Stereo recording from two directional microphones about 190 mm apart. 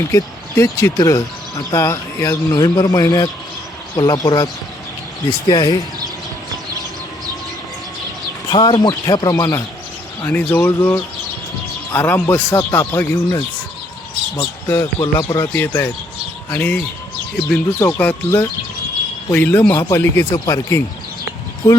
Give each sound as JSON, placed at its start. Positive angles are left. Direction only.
{"t": 0.1, "sound": "speech", "side_deg": 15}
{"t": 5.5, "sound": "speech", "side_deg": 20}
{"t": 8.4, "sound": "speech", "side_deg": 25}
{"t": 14.8, "sound": "speech", "side_deg": 25}
{"t": 15.4, "sound": "speech", "side_deg": 10}